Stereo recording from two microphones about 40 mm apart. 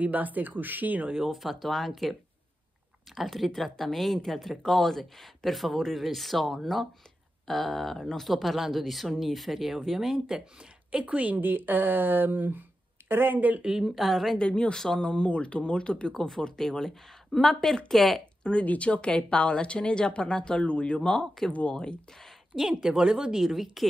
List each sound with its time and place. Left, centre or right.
0.0 s speech: right
1.2 s speech: centre
3.2 s speech: centre
10.1 s speech: right
10.9 s a woman's voice: right
11.4 s speech: right
13.6 s speech: right
13.8 s speech: centre
14.3 s speech: left; by 18.2 s centre
18.4 s speech: left
21.5 s speech: left
21.7 s speech: left
22.8 s speech: right; by 23.9 s centre